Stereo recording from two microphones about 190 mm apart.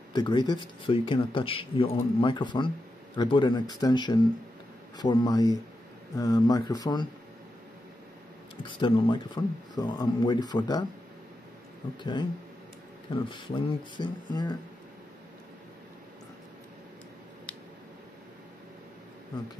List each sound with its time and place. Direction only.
0.1 s speech: 25° left (ahead or behind)
8.6 s speech: 25° left (ahead or behind)
12.0 s speech: 25° left (ahead or behind)